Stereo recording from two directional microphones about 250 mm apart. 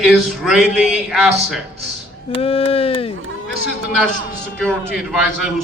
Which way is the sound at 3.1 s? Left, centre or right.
Right.